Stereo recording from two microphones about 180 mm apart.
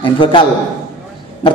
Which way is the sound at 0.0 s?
30° left (ahead or behind).